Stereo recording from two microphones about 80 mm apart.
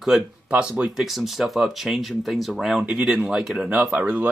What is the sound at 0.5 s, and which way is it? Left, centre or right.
Speech, centre.